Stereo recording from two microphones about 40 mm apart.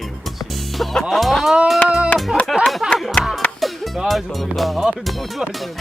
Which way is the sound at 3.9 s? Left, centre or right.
Centre.